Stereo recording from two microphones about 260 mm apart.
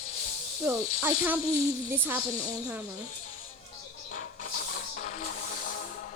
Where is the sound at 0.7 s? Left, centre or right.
Centre.